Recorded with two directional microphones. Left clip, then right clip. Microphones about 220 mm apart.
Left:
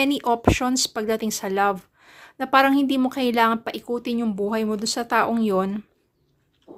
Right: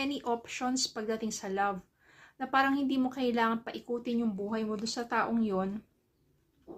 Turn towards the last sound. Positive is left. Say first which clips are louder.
# left 10 dB
turn(degrees=45)  # may be behind; listen again after turning